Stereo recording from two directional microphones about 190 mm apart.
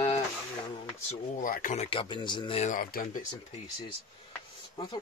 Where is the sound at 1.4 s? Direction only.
45° left (ahead or behind).